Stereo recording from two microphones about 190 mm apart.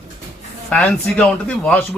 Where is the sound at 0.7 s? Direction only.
5° left (ahead or behind).